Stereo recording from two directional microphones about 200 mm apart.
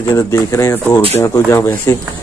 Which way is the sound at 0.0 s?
15° left (ahead or behind).